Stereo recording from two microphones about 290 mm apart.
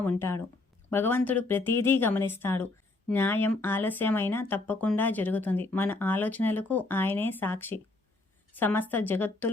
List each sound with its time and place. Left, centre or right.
0.2 s speech: centre